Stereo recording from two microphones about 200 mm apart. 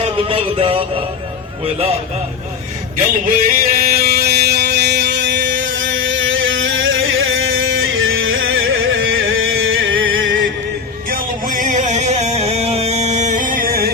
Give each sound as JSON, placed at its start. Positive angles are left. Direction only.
{"t": 0.3, "sound": "music", "side_deg": -30}
{"t": 3.2, "sound": "music", "side_deg": -45}
{"t": 11.1, "sound": "music", "side_deg": -40}